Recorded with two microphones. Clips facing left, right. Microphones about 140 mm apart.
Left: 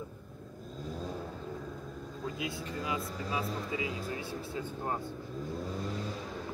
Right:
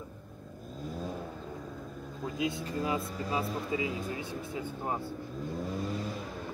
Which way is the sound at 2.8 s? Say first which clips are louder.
Right 4 dB; 35° right (ahead or behind).